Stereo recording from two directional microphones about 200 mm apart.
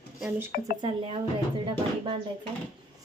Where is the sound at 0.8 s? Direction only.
25° right (ahead or behind).